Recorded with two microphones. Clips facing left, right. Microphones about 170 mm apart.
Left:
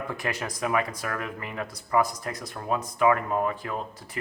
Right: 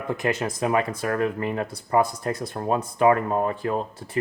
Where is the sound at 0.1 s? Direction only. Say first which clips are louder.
Right 7 dB; 20° right (ahead or behind).